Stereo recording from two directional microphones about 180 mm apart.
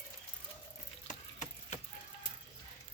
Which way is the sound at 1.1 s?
40° left (ahead or behind).